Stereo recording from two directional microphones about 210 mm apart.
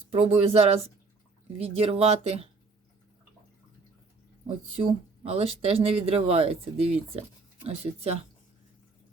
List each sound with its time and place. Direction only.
0.1 s speech: 30° right (ahead or behind)
4.4 s speech: 25° right (ahead or behind)